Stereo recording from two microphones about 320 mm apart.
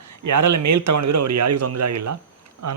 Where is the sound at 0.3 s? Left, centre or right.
Right.